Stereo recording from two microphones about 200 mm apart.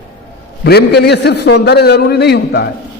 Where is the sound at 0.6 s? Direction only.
55° left (ahead or behind).